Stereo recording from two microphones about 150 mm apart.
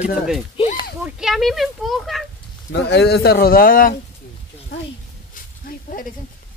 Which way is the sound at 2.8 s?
90° left.